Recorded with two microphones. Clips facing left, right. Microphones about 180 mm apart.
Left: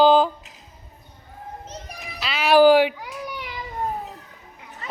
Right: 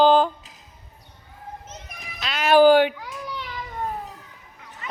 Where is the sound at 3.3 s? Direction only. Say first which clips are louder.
Even; 15° left (ahead or behind).